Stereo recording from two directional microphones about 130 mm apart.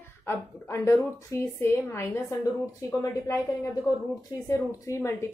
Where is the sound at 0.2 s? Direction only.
20° left (ahead or behind).